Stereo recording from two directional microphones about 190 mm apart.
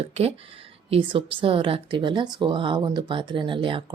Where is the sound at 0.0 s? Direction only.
30° right (ahead or behind).